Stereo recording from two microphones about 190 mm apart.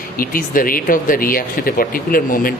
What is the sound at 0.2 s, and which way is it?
Speech, 45° left (ahead or behind).